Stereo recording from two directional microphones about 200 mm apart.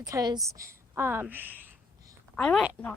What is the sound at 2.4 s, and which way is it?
Speech, centre (ahead or behind).